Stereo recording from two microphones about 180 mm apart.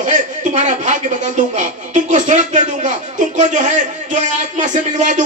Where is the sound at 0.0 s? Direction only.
45° right (ahead or behind).